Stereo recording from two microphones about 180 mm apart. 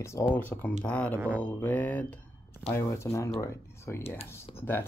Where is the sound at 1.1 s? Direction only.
10° right (ahead or behind).